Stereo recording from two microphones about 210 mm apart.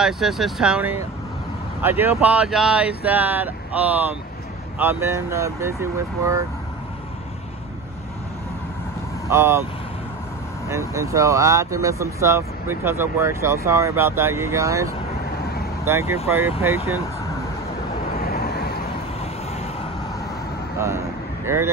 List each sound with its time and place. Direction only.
0.0 s speech: centre (ahead or behind)
9.3 s speech: 10° right (ahead or behind)
10.7 s speech: 15° right (ahead or behind)
16.3 s speech: 10° right (ahead or behind)
16.7 s speech: 90° right
18.1 s vehicle: 45° left (ahead or behind)
21.5 s speech: 10° right (ahead or behind)